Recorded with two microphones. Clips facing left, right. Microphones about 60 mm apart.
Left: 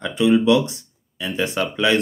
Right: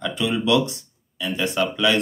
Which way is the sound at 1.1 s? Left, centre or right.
Left.